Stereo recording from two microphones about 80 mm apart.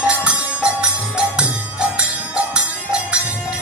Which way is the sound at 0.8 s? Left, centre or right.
Centre.